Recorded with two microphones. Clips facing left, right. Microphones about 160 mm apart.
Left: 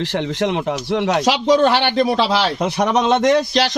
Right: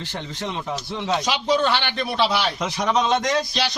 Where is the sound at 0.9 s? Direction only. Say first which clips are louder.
Left 7 dB; 80° left.